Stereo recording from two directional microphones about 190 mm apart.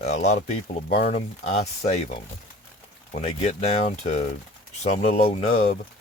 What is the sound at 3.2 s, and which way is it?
Speech, 35° left (ahead or behind).